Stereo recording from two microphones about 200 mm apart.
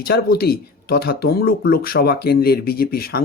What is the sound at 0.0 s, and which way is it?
Speech, 50° left (ahead or behind).